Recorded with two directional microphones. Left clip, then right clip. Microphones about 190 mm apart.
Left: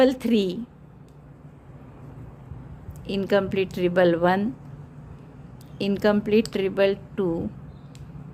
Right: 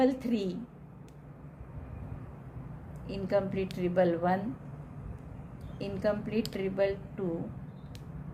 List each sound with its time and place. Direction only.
0.0 s a woman's voice: 40° left (ahead or behind)
3.1 s speech: 45° left (ahead or behind)
5.7 s speech: 45° left (ahead or behind)